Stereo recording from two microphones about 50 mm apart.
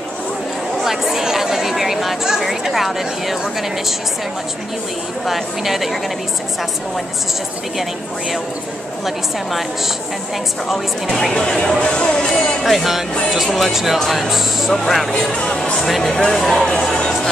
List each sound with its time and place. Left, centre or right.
0.8 s speech: centre
5.2 s speech: centre
9.0 s speech: centre
10.7 s speech: centre
12.6 s speech: centre
15.1 s speech: centre